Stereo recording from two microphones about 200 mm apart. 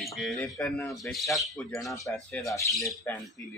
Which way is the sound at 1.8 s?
15° left (ahead or behind).